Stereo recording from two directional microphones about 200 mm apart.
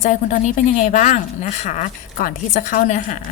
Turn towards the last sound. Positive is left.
turn(degrees=40)  # may be behind; listen again after turning